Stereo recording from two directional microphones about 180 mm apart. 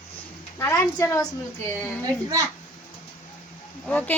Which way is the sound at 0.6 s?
15° left (ahead or behind).